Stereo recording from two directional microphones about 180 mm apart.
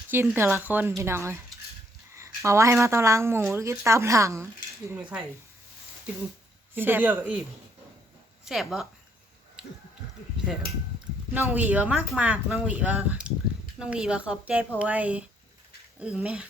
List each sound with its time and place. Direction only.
0.1 s speech: 10° right (ahead or behind)
6.7 s speech: 10° right (ahead or behind)
8.4 s speech: centre (ahead or behind)
11.3 s speech: 10° right (ahead or behind)